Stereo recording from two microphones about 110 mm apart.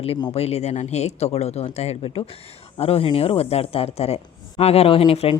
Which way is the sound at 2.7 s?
60° left (ahead or behind).